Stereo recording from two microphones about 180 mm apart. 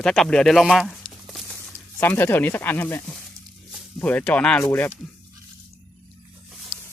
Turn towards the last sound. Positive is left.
turn(degrees=-5)  # may be behind; listen again after turning